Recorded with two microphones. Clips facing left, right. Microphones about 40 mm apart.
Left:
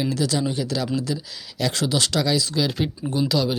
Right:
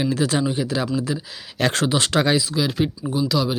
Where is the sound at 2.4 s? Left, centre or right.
Centre.